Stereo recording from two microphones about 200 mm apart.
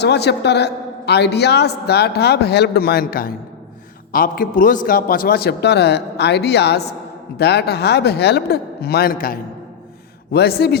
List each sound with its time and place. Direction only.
0.0 s a woman's voice: 55° left (ahead or behind)